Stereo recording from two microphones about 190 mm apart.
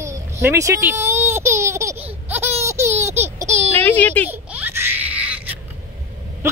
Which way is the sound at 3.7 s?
10° left (ahead or behind).